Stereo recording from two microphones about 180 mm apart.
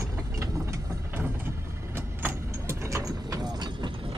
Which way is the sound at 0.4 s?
15° right (ahead or behind).